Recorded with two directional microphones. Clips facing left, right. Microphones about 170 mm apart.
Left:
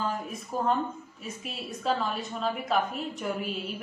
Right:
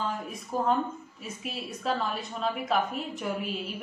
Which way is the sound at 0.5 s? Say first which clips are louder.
Right 1 dB; centre (ahead or behind).